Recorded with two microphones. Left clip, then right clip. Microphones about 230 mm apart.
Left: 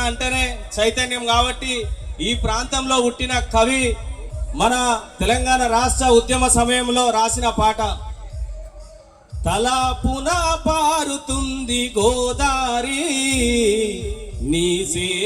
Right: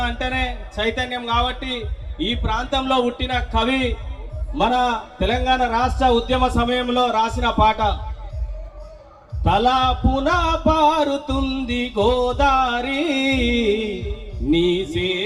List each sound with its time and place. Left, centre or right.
0.0 s a sound: left
0.7 s a man's voice: left
9.4 s a man's voice: left